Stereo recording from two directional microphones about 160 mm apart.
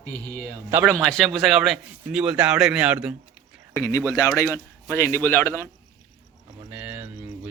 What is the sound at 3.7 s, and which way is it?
Speech, 15° left (ahead or behind).